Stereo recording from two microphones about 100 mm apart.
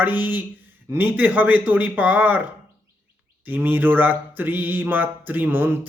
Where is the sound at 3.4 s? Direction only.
20° right (ahead or behind).